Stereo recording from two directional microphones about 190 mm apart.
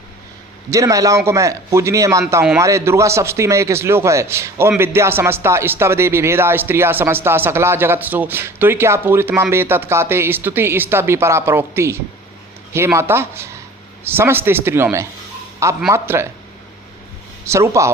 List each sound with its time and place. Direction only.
0.7 s speech: 15° right (ahead or behind)
17.4 s speech: 15° right (ahead or behind)